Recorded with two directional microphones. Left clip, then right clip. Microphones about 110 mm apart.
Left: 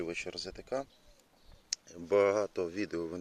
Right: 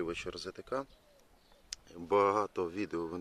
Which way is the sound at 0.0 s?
10° right (ahead or behind).